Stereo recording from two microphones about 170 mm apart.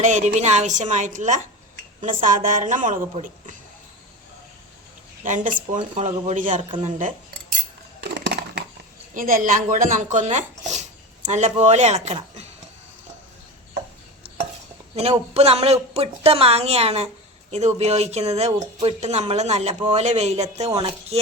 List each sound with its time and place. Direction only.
0.0 s a woman's voice: 45° right (ahead or behind)
5.2 s a woman's voice: 50° right (ahead or behind)
8.1 s crushing: 85° right
9.1 s speech: 55° right (ahead or behind)
14.9 s speech: 40° right (ahead or behind)